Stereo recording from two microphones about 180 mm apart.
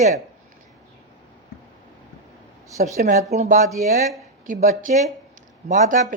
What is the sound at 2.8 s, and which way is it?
Speech, 50° right (ahead or behind).